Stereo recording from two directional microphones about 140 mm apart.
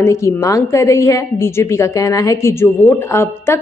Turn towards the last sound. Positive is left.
turn(degrees=20)  # may be behind; listen again after turning